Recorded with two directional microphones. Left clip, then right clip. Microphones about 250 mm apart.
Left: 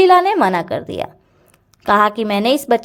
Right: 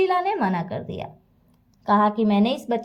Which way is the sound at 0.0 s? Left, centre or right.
Left.